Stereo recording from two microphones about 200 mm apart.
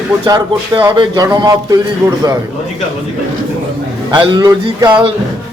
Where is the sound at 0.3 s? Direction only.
20° right (ahead or behind).